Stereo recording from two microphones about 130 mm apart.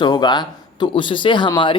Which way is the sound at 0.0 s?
35° left (ahead or behind).